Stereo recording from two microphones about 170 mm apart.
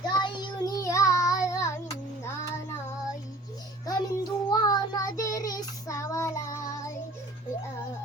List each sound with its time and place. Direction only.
0.1 s child singing: 25° left (ahead or behind)
3.8 s child singing: 25° left (ahead or behind)